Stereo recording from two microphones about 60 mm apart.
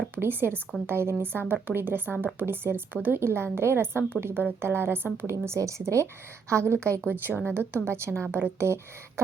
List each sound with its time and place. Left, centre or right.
0.2 s speech: right
5.2 s a woman's voice: right
7.0 s speech: right